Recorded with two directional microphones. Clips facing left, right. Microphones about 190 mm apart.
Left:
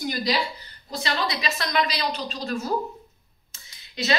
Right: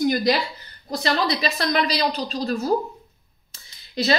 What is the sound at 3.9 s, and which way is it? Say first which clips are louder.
Speech: right 4 dB; 35° right (ahead or behind).